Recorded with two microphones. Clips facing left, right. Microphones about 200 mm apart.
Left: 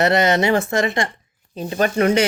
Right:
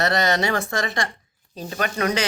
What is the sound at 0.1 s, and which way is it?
Speech, 25° left (ahead or behind).